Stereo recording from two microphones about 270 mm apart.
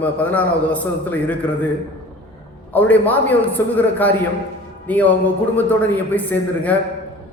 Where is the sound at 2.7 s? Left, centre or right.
Centre.